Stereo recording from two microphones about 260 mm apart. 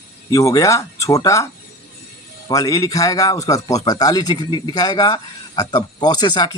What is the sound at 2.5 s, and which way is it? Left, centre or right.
A man's voice, centre.